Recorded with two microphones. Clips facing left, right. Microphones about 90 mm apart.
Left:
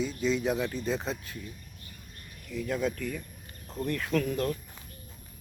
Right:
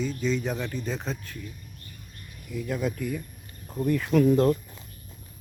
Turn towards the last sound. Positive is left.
turn(degrees=-25)  # may be behind; listen again after turning